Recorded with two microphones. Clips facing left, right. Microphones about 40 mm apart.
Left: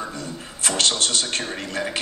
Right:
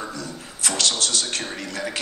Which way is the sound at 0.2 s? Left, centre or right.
Left.